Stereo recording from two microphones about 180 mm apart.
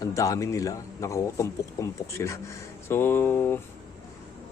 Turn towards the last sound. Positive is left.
turn(degrees=10)  # may be behind; listen again after turning